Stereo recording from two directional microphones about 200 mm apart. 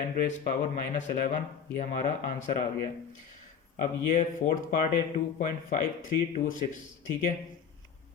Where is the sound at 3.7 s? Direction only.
45° left (ahead or behind).